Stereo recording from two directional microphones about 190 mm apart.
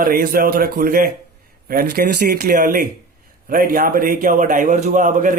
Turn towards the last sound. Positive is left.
turn(degrees=-45)  # may be behind; listen again after turning